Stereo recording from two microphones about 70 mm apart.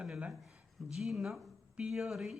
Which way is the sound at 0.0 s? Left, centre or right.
Centre.